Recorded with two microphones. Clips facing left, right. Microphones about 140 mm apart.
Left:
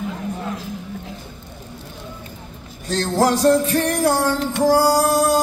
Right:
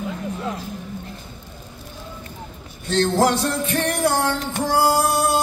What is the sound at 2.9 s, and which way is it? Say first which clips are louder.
Music: even; 40° left (ahead or behind).